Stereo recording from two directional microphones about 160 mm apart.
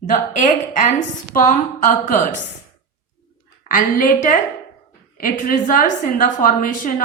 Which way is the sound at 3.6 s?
60° left (ahead or behind).